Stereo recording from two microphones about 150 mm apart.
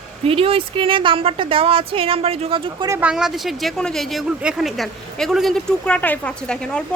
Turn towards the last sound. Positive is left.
turn(degrees=5)  # may be behind; listen again after turning